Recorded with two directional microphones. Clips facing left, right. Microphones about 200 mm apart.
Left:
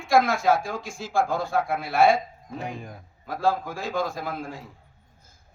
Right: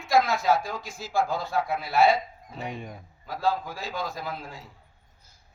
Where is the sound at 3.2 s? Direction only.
50° left (ahead or behind).